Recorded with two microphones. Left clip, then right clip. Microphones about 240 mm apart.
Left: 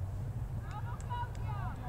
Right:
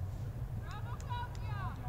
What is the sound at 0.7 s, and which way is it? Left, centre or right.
Vehicle, right.